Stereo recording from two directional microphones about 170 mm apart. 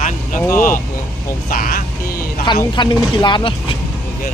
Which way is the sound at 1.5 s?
55° left (ahead or behind).